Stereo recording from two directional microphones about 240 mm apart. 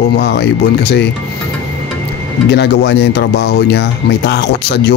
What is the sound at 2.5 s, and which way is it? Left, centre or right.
Speech, left.